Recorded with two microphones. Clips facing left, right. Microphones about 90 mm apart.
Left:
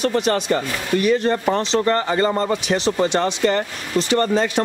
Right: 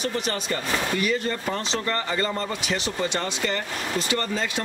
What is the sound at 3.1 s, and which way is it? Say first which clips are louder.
Speech: left 8 dB; 60° left (ahead or behind).